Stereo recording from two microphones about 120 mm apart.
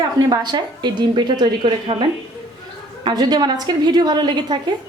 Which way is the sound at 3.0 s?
40° right (ahead or behind).